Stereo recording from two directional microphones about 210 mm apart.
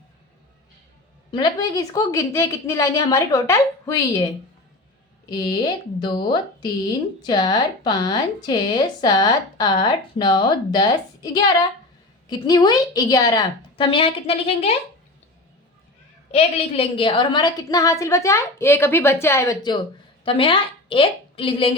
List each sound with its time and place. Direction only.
1.3 s a woman's voice: 20° left (ahead or behind)
7.3 s speech: 20° left (ahead or behind)
16.3 s a woman's voice: 25° left (ahead or behind)